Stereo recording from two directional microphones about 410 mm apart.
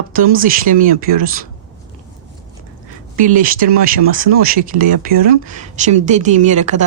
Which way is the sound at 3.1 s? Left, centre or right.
Centre.